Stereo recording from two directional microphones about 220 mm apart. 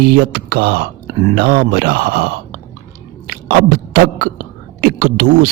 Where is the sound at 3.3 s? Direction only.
40° right (ahead or behind).